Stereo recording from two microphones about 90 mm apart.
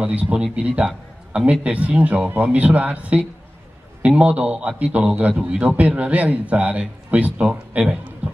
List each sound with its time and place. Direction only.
0.0 s a man's voice: 15° right (ahead or behind)